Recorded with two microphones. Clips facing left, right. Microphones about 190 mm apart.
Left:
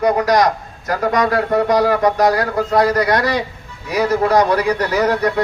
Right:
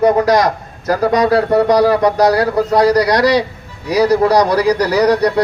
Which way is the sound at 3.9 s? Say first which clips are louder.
Right 4 dB; 35° right (ahead or behind).